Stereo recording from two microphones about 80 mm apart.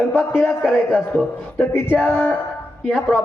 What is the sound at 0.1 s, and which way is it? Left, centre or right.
Speech, left.